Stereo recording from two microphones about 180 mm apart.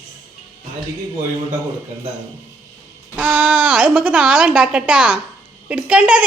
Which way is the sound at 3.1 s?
10° right (ahead or behind).